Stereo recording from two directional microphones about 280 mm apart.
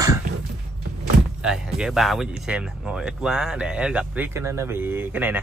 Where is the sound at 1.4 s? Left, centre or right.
Centre.